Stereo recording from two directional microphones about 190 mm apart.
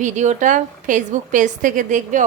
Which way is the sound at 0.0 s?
40° right (ahead or behind).